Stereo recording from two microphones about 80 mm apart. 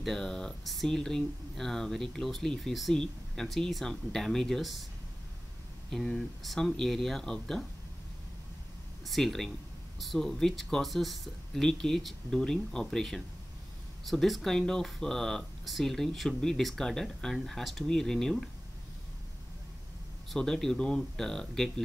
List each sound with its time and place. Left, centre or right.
0.0 s speech: centre
5.9 s speech: centre
9.0 s speech: centre
20.2 s speech: centre